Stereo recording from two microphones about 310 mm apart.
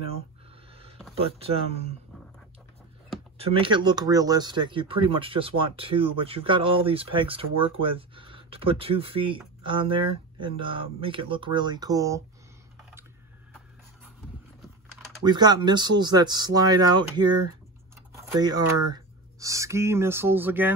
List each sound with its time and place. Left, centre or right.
1.1 s speech: centre
3.3 s speech: centre
15.2 s speech: centre